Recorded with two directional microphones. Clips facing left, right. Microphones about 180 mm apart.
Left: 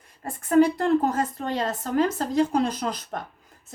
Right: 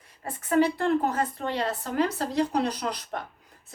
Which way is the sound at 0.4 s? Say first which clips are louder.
Left 4 dB; 45° left (ahead or behind).